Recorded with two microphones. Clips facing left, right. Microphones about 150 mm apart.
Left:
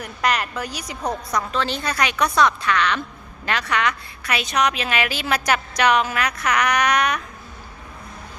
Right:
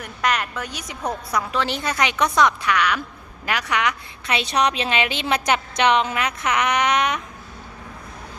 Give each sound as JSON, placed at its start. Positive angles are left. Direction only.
{"t": 0.0, "sound": "a woman's voice", "side_deg": 0}